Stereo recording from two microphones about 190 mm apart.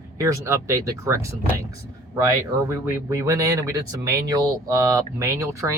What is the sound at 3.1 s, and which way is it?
Speech, 15° right (ahead or behind).